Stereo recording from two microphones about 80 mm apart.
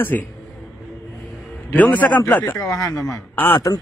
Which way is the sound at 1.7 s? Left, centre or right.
Left.